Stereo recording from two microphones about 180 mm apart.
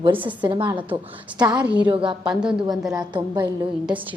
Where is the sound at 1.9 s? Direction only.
30° right (ahead or behind).